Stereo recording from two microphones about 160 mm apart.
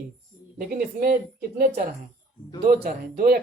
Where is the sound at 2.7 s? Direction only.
65° right (ahead or behind).